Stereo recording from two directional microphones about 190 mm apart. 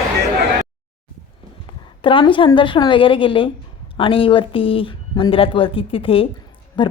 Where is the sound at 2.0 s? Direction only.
25° left (ahead or behind).